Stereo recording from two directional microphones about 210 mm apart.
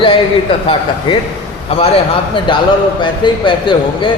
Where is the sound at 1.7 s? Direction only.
25° left (ahead or behind).